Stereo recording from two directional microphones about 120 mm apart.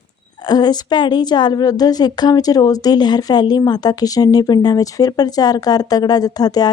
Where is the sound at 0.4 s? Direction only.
35° left (ahead or behind).